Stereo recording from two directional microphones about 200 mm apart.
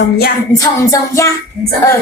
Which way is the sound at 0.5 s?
15° left (ahead or behind).